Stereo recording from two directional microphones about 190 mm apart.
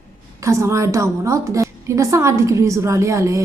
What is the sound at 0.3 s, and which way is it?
A woman's voice, 15° right (ahead or behind).